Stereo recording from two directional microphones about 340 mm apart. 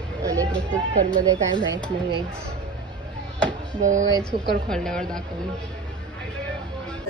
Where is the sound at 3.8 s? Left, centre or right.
Right.